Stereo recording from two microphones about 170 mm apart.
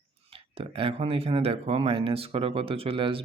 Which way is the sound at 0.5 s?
35° right (ahead or behind).